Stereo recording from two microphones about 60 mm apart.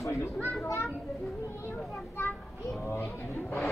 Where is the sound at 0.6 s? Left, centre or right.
Left.